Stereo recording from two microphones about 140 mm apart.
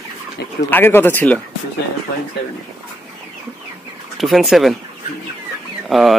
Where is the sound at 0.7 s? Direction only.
15° left (ahead or behind).